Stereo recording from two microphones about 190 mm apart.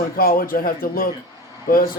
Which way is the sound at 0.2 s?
50° left (ahead or behind).